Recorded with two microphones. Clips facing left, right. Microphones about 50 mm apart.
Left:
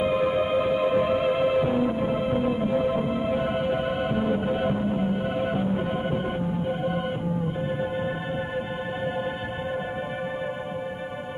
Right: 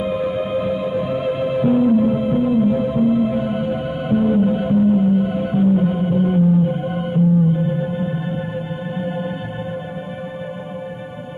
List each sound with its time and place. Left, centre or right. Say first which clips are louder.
0.0 s music: right 2 dB; centre
6.0 s organ: right 10 dB; centre